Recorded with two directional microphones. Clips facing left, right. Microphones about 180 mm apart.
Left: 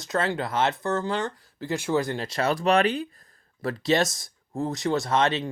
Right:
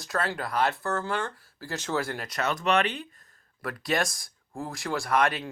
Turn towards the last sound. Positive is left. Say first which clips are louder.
# left 2 dB
turn(degrees=25)  # may be behind; listen again after turning